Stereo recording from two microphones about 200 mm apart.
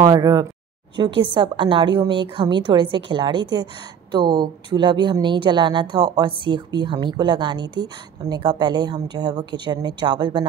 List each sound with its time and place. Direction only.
0.0 s speech: 20° right (ahead or behind)